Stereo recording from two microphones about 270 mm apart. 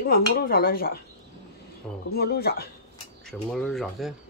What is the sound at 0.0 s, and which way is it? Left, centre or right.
Speech, left.